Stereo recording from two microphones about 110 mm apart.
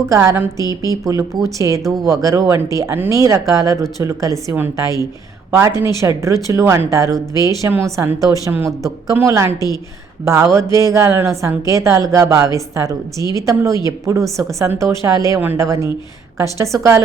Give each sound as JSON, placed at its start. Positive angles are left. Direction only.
{"t": 0.0, "sound": "speech", "side_deg": -30}
{"t": 5.5, "sound": "speech", "side_deg": -25}